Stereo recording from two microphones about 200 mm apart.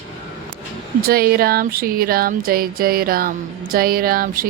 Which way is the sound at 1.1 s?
50° right (ahead or behind).